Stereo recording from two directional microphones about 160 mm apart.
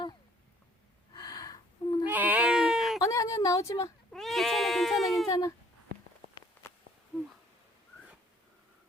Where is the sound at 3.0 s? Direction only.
20° left (ahead or behind).